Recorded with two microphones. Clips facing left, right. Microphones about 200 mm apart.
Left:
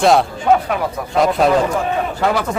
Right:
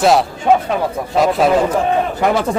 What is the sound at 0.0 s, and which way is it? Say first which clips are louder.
A man's voice: even; centre (ahead or behind).